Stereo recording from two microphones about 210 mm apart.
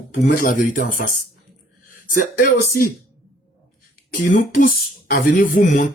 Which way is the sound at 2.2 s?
45° left (ahead or behind).